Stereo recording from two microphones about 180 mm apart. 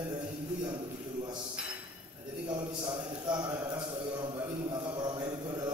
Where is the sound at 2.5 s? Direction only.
25° right (ahead or behind).